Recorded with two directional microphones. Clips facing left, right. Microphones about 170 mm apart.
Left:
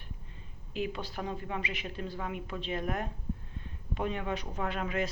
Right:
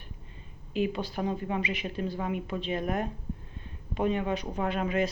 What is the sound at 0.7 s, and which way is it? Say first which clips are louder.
Speech: right 6 dB; 15° right (ahead or behind).